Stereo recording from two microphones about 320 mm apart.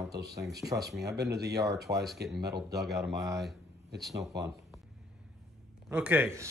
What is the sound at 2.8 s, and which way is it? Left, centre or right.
Speech, centre.